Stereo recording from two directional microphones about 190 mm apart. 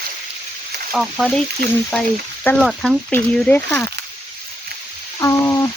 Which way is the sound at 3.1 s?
10° left (ahead or behind).